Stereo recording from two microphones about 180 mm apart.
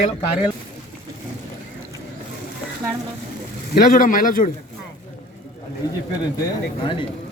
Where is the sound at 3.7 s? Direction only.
50° left (ahead or behind).